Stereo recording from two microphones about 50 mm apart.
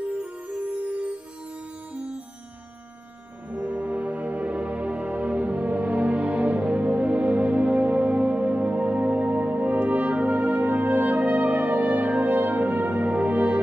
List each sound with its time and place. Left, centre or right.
3.4 s music: right